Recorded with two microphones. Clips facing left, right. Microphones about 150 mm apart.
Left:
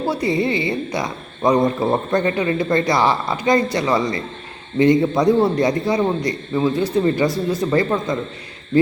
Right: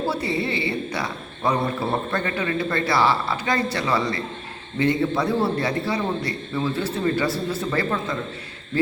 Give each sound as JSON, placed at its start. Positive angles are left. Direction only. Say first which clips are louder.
{"t": 0.1, "sound": "a woman's voice", "louder": "left 5 dB", "side_deg": 15}